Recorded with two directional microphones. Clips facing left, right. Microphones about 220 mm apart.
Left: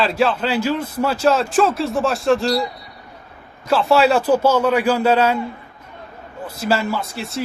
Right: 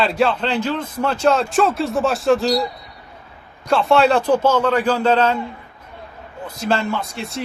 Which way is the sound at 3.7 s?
5° left (ahead or behind).